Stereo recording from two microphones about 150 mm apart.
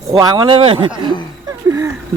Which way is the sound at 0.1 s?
25° right (ahead or behind).